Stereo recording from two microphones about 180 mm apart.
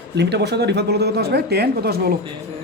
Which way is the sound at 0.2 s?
70° right (ahead or behind).